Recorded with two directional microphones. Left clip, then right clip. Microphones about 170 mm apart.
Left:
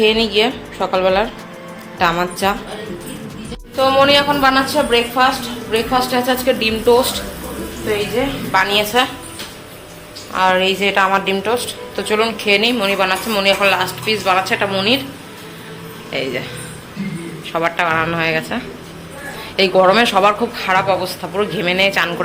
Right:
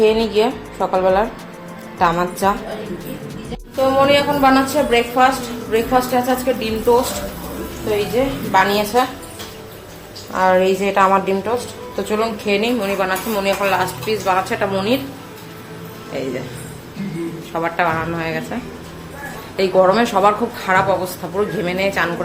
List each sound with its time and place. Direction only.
0.0 s a woman's voice: 5° right (ahead or behind)
3.8 s a woman's voice: centre (ahead or behind)
5.7 s a woman's voice: centre (ahead or behind)
8.2 s a woman's voice: 20° right (ahead or behind)
10.3 s a woman's voice: 10° right (ahead or behind)
16.1 s a woman's voice: centre (ahead or behind)
17.5 s a woman's voice: 5° left (ahead or behind); by 21.1 s 10° right (ahead or behind)
21.3 s a woman's voice: centre (ahead or behind)